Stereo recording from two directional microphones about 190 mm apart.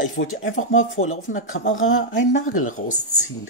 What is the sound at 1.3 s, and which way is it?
Speech, 40° left (ahead or behind).